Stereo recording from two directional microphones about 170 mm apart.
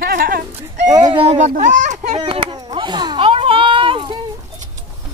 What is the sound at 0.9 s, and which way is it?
A child's voice, 25° right (ahead or behind).